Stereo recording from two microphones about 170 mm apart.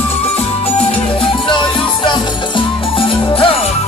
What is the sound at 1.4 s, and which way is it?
Music, 30° left (ahead or behind).